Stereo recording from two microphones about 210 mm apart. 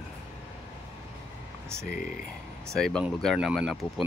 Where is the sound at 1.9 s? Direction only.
40° left (ahead or behind).